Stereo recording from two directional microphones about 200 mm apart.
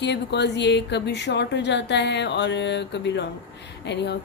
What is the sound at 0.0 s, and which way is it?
Speech, 60° left (ahead or behind).